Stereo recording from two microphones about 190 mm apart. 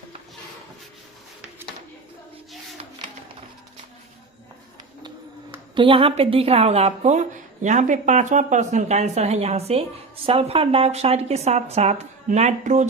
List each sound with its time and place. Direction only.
5.7 s a woman's voice: 25° right (ahead or behind)